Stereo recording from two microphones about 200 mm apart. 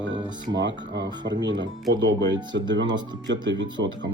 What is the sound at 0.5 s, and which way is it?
Speech, 60° right (ahead or behind).